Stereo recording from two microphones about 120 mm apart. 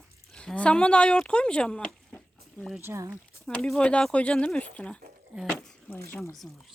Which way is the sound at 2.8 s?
25° right (ahead or behind).